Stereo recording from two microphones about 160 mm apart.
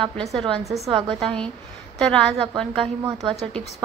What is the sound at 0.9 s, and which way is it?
Speech, 30° right (ahead or behind).